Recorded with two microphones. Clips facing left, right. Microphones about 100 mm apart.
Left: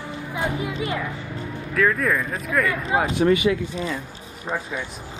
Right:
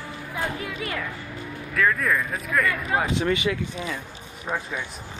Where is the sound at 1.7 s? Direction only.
Centre (ahead or behind).